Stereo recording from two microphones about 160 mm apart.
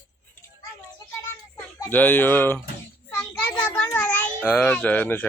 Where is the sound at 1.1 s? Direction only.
15° left (ahead or behind).